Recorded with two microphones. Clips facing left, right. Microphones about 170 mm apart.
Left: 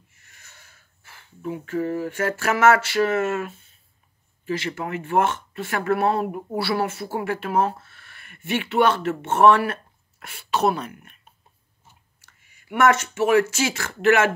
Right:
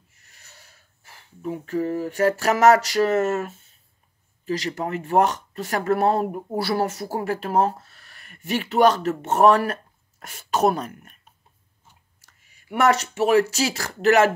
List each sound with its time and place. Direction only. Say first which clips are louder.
0.2 s speech: right 1 dB; 35° right (ahead or behind)
12.2 s speech: left 1 dB; 35° right (ahead or behind)